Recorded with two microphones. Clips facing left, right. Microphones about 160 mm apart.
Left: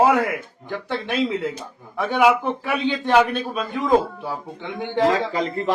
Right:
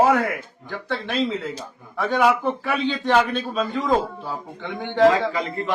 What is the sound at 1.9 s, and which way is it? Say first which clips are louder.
A man's voice: left 2 dB; 15° left (ahead or behind).